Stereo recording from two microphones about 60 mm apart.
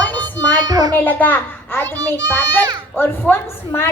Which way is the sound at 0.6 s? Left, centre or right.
Right.